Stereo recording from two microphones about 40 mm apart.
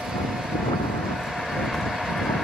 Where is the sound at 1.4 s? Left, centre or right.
Centre.